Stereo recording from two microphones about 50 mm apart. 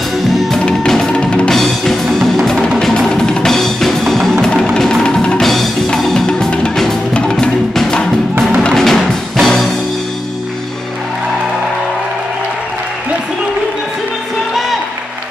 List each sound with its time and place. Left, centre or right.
0.3 s music: centre
0.7 s music: centre
1.5 s music: centre
3.5 s drum: centre
4.7 s music: centre
5.4 s music: centre